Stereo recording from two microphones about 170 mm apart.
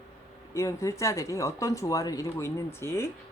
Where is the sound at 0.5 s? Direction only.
20° left (ahead or behind).